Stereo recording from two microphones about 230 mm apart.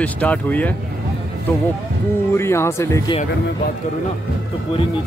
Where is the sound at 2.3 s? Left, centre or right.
Centre.